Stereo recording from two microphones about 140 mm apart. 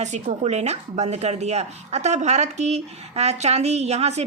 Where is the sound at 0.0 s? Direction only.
55° right (ahead or behind).